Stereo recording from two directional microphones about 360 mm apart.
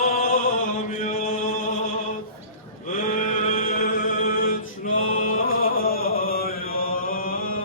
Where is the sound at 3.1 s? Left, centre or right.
Left.